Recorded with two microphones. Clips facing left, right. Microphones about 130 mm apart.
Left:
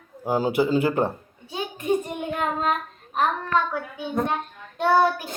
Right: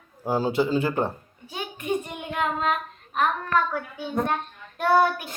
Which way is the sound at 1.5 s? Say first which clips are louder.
Left 4 dB; 30° left (ahead or behind).